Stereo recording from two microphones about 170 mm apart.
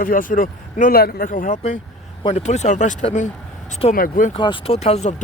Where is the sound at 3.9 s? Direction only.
55° left (ahead or behind).